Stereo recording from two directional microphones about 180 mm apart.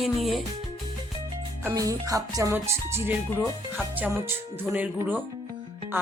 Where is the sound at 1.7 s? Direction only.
20° right (ahead or behind).